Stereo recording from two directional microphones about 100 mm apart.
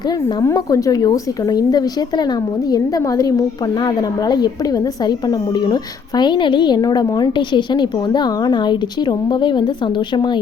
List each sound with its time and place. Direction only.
0.0 s a woman's voice: 45° left (ahead or behind)